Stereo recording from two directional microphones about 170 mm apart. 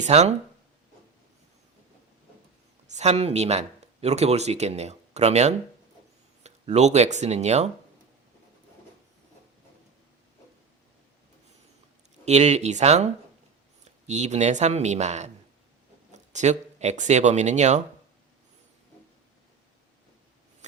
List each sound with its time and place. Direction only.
0.0 s speech: 40° right (ahead or behind)
2.8 s speech: 40° right (ahead or behind)
12.2 s speech: 40° right (ahead or behind)
14.1 s speech: 40° right (ahead or behind)